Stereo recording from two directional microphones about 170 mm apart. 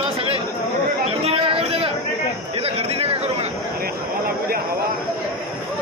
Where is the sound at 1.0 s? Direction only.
35° right (ahead or behind).